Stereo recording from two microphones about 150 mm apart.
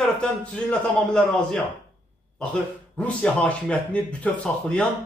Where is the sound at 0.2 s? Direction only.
5° left (ahead or behind).